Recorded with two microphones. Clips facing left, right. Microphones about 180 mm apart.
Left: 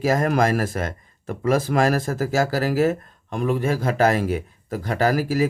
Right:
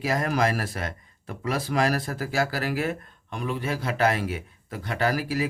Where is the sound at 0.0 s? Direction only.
45° left (ahead or behind).